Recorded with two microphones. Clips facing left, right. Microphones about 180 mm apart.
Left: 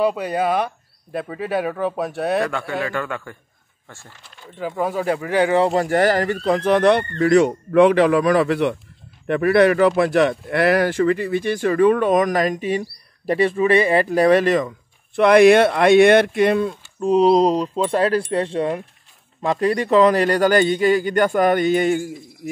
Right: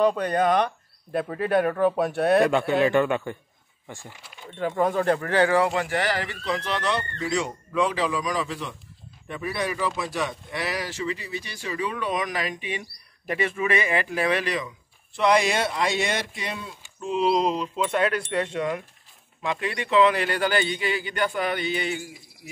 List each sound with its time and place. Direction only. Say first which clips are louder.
0.0 s speech: left 1 dB; 5° left (ahead or behind)
2.4 s a man's voice: right 4 dB; 20° right (ahead or behind)
4.5 s speech: even; 5° left (ahead or behind)
5.6 s speech: left 7 dB; 35° left (ahead or behind)
15.1 s a man's voice: left 10 dB; 60° left (ahead or behind)